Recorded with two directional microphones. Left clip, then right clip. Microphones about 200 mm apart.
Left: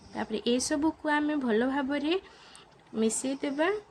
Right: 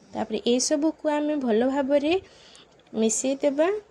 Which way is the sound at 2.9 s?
15° right (ahead or behind).